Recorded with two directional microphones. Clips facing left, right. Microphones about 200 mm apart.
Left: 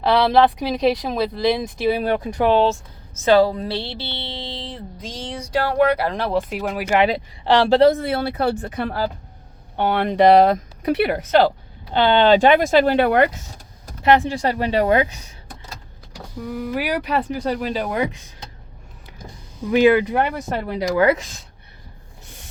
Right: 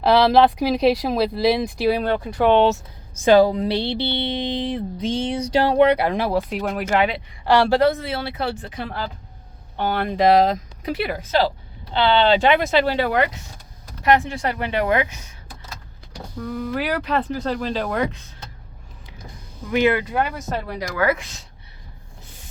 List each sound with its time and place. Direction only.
0.0 s speech: centre (ahead or behind)
3.2 s speech: 15° right (ahead or behind)
6.3 s speech: centre (ahead or behind)
7.4 s speech: 20° left (ahead or behind)
7.9 s speech: 50° left (ahead or behind)
9.7 s speech: 60° left (ahead or behind)
11.9 s speech: 50° left (ahead or behind)
14.0 s speech: 30° left (ahead or behind)
16.4 s speech: 10° left (ahead or behind)
19.6 s speech: 15° left (ahead or behind)